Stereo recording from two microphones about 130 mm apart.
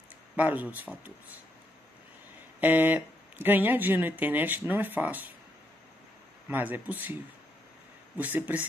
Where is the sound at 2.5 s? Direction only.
15° right (ahead or behind).